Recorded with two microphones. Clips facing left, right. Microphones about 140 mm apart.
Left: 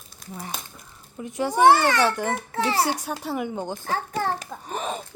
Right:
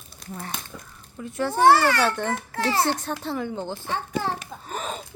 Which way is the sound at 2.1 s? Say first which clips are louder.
Left 1 dB; 10° left (ahead or behind).